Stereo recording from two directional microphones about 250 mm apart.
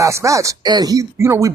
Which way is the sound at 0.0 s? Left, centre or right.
Centre.